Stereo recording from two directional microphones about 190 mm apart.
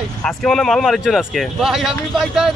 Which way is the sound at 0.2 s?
Centre (ahead or behind).